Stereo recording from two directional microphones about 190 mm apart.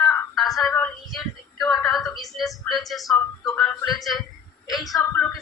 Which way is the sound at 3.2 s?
5° left (ahead or behind).